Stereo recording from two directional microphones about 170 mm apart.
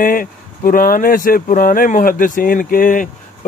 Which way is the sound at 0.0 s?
55° left (ahead or behind).